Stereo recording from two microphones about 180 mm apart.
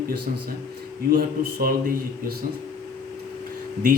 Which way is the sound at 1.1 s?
55° right (ahead or behind).